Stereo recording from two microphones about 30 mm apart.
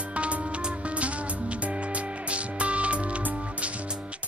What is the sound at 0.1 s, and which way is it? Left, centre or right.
Music, right.